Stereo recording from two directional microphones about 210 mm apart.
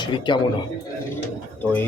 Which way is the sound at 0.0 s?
20° left (ahead or behind).